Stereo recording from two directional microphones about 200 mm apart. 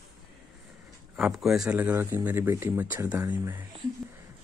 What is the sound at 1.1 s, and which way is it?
Speech, 5° right (ahead or behind).